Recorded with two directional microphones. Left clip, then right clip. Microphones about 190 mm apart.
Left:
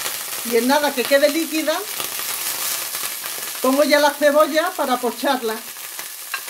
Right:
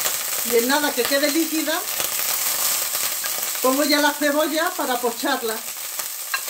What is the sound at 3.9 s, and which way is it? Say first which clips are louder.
Speech: left 4 dB; 50° left (ahead or behind).